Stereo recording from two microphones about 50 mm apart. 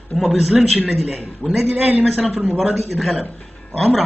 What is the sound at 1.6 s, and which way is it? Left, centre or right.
Speech, right.